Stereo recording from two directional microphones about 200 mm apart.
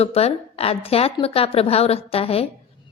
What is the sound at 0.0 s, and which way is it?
A woman's voice, 30° left (ahead or behind).